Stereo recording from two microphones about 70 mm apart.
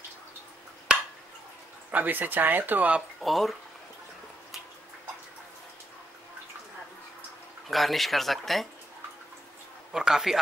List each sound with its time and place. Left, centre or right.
0.9 s a sound: centre
1.9 s speech: right
3.2 s speech: centre
7.6 s speech: centre
9.9 s a man's voice: centre